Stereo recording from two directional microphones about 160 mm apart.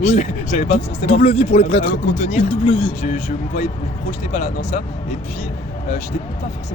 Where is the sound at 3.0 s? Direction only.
50° left (ahead or behind).